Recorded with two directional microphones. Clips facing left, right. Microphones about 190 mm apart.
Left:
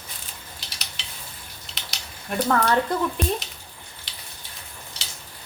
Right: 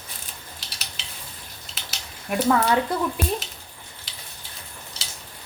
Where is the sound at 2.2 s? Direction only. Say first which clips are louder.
Right 2 dB; 5° right (ahead or behind).